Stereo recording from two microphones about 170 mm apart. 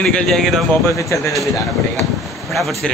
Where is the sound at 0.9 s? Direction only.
15° left (ahead or behind).